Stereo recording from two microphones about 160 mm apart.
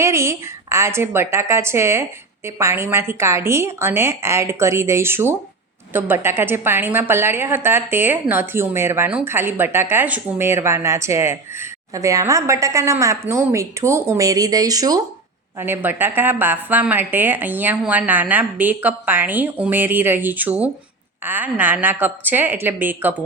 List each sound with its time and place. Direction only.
0.0 s a woman's voice: 15° right (ahead or behind)